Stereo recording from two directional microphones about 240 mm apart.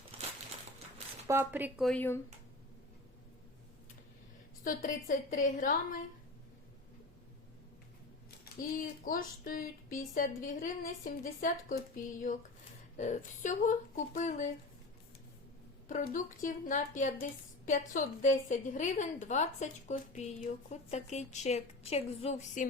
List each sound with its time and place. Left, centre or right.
0.1 s a sound: right
1.3 s speech: centre
4.6 s speech: left
8.5 s speech: left
15.9 s a woman's voice: left